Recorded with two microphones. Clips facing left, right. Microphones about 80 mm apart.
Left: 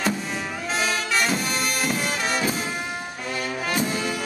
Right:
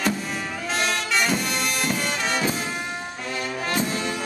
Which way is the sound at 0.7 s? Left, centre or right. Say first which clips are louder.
Even; centre.